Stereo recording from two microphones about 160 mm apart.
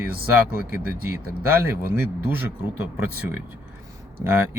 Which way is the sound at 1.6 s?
15° right (ahead or behind).